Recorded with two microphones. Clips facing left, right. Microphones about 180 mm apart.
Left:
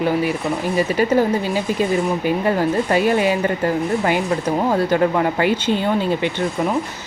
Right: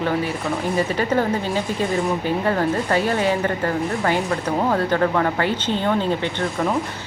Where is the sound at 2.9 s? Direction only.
15° left (ahead or behind).